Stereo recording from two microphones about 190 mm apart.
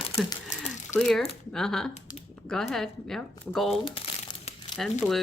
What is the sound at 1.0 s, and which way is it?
Speech, centre (ahead or behind).